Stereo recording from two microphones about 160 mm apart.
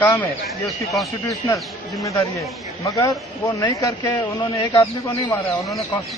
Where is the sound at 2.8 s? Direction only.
20° left (ahead or behind).